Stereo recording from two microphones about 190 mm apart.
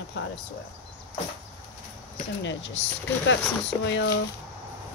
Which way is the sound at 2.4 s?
75° left (ahead or behind).